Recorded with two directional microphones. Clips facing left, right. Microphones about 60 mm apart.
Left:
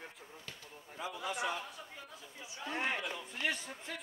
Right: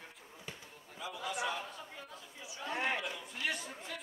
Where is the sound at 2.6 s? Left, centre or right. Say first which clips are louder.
Right 1 dB; centre.